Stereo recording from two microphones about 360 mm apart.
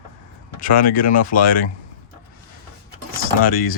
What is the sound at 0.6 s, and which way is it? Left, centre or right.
Speech, left.